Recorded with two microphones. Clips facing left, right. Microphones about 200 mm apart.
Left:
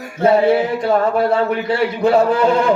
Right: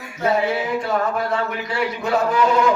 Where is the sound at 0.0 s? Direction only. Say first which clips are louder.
Left 7 dB; 30° left (ahead or behind).